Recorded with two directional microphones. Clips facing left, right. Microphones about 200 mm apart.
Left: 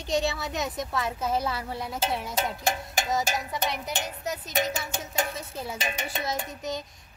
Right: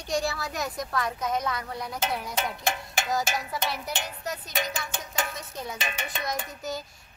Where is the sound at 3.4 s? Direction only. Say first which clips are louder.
Left 1 dB; 20° left (ahead or behind).